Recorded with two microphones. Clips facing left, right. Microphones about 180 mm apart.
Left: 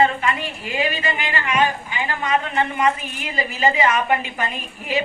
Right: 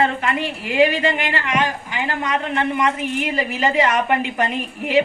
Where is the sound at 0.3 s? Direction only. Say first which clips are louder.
Right 8 dB; 70° right (ahead or behind).